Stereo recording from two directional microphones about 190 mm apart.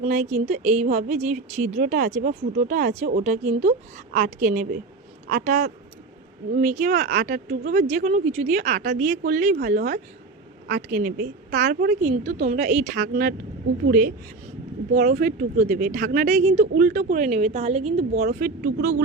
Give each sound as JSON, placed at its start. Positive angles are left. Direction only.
{"t": 0.1, "sound": "a woman's voice", "side_deg": -40}
{"t": 8.8, "sound": "speech", "side_deg": -50}
{"t": 12.0, "sound": "a woman's voice", "side_deg": -40}
{"t": 12.5, "sound": "speech", "side_deg": -50}
{"t": 15.0, "sound": "a woman's voice", "side_deg": -50}
{"t": 18.3, "sound": "speech", "side_deg": -50}